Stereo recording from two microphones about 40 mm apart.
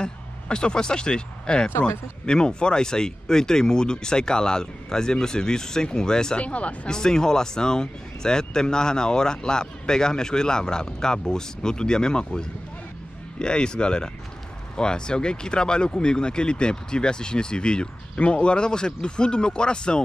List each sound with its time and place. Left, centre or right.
0.0 s speech: left
6.4 s speech: left
6.9 s speech: centre